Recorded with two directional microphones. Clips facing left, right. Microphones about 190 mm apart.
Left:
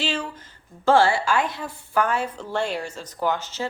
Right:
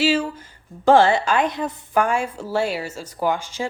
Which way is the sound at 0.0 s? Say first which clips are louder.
Right 8 dB; 5° right (ahead or behind).